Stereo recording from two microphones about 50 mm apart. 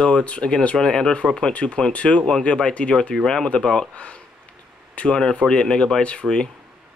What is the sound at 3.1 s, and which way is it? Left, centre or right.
Speech, centre.